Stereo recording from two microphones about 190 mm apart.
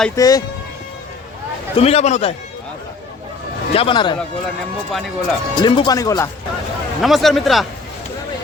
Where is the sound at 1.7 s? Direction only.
30° left (ahead or behind).